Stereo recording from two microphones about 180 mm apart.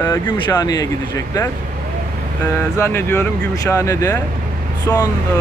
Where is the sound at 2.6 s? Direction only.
15° left (ahead or behind).